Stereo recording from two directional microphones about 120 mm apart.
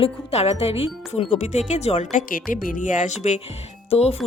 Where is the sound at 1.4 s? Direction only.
80° left.